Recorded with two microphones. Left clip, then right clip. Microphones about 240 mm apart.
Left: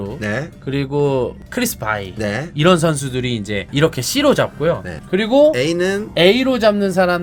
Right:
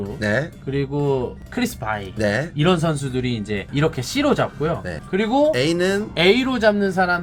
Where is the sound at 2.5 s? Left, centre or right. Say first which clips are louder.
Left 6 dB; left.